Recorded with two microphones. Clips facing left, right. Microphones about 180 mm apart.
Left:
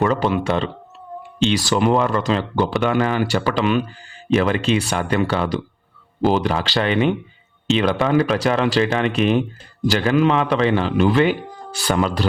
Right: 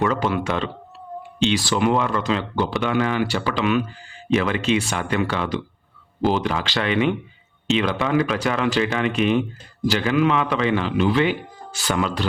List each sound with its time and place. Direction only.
0.0 s speech: 35° left (ahead or behind)
10.9 s speech: 50° left (ahead or behind)